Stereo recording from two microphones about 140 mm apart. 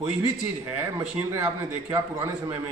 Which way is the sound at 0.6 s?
20° right (ahead or behind).